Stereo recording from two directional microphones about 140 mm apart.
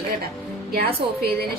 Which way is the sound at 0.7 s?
90° right.